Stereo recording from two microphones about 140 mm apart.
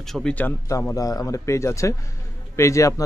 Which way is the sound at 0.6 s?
25° left (ahead or behind).